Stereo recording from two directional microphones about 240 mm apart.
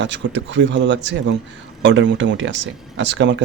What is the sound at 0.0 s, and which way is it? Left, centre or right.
Speech, right.